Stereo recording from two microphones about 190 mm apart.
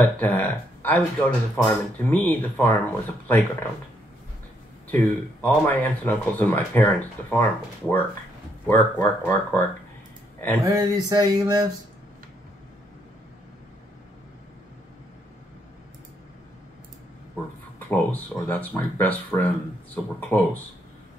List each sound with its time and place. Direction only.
0.0 s speech: 10° left (ahead or behind)
4.9 s speech: 10° left (ahead or behind)
10.6 s a sound: 20° right (ahead or behind)
17.7 s speech: 10° left (ahead or behind)